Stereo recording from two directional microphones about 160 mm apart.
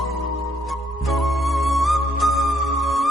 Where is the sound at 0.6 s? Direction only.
Centre (ahead or behind).